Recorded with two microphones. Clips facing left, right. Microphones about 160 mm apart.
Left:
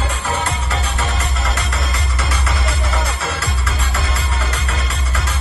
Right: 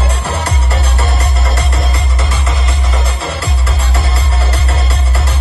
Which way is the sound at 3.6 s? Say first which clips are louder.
Right 4 dB; 35° right (ahead or behind).